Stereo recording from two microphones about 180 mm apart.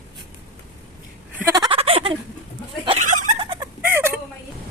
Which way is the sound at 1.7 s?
35° right (ahead or behind).